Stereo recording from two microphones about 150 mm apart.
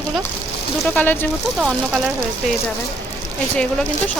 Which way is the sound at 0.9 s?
10° left (ahead or behind).